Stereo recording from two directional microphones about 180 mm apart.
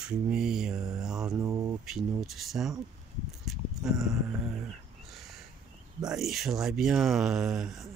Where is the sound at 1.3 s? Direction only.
15° right (ahead or behind).